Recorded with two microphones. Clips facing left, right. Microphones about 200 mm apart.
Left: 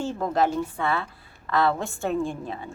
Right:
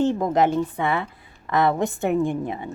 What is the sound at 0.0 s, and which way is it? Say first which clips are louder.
A woman's voice: right 5 dB; 20° right (ahead or behind).